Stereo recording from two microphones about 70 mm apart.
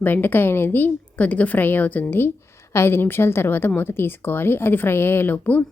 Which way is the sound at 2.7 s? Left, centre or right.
Left.